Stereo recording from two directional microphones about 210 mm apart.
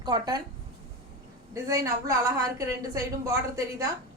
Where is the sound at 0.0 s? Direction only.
20° right (ahead or behind).